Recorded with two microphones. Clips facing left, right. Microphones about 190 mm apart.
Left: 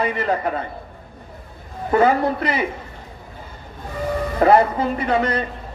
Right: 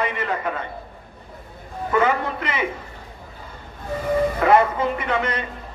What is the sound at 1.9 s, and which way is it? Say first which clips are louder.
Speech: left 4 dB; 35° left (ahead or behind).